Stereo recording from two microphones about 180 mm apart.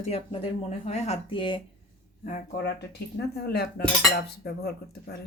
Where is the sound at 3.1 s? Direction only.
60° left (ahead or behind).